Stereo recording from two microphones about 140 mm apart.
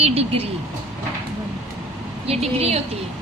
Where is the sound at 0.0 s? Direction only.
45° right (ahead or behind).